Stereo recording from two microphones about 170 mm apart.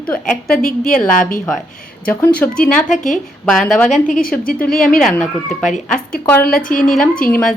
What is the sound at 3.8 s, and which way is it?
Speech, 50° left (ahead or behind).